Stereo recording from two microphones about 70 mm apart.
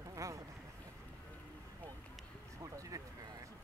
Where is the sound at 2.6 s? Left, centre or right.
Right.